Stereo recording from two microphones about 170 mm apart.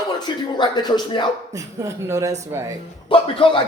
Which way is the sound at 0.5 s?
25° left (ahead or behind).